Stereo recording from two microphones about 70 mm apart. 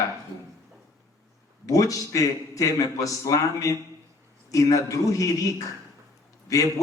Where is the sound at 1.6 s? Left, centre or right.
Left.